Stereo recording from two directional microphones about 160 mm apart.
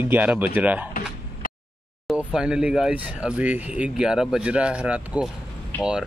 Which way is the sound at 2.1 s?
5° right (ahead or behind).